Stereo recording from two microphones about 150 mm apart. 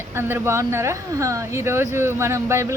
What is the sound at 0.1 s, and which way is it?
Speech, 15° right (ahead or behind).